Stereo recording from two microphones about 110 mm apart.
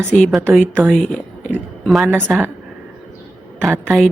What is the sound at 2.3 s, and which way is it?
Speech, centre (ahead or behind).